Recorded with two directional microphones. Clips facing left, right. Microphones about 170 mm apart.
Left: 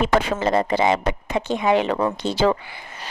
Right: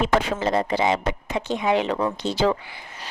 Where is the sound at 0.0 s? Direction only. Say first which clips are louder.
Left 2 dB; 60° left (ahead or behind).